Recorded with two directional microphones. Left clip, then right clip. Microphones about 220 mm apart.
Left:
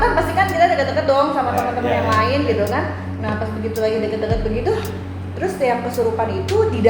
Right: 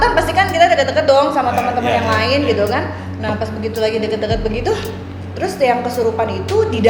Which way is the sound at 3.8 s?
25° right (ahead or behind).